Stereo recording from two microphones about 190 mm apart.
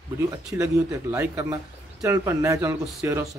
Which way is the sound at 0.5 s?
10° right (ahead or behind).